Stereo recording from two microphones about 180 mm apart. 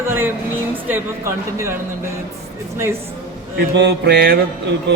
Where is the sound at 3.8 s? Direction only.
70° right (ahead or behind).